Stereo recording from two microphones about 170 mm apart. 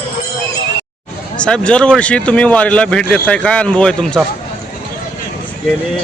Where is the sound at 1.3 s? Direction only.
5° left (ahead or behind).